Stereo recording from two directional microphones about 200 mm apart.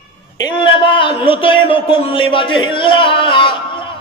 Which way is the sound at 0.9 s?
25° left (ahead or behind).